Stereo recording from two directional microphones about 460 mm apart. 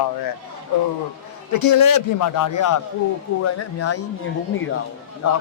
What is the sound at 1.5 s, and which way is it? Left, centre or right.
A man's voice, left.